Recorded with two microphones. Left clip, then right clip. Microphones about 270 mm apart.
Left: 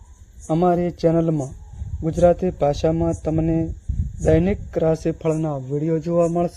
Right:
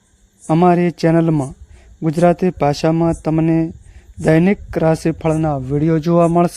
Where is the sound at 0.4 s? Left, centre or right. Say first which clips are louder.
Right 5 dB; right.